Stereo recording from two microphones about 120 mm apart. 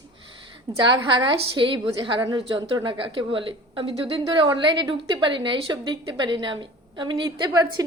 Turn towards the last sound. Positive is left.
turn(degrees=-35)  # may be behind; listen again after turning